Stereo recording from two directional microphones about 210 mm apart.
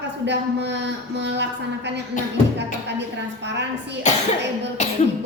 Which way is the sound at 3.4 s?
55° right (ahead or behind).